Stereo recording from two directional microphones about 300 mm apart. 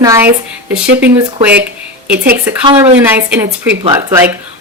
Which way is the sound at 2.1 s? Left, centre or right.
Right.